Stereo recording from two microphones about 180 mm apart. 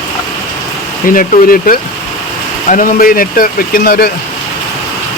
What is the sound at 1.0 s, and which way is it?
Speech, 50° left (ahead or behind).